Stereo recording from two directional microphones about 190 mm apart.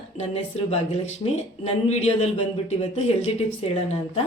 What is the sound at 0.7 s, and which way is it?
A man's voice, 30° left (ahead or behind).